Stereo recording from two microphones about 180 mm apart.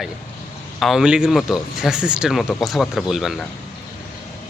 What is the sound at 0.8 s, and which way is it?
Speech, centre (ahead or behind).